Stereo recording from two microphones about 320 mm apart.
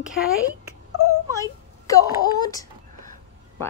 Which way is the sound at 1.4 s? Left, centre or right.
Centre.